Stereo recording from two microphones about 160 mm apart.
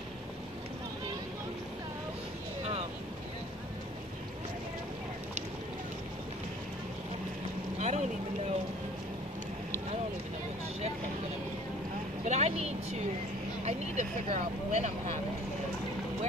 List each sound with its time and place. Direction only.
7.8 s vehicle: 45° right (ahead or behind)
12.3 s vehicle: 40° right (ahead or behind)
13.7 s speech: 45° right (ahead or behind)